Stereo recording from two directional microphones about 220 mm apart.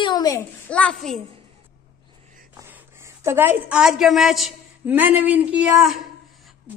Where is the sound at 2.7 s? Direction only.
10° right (ahead or behind).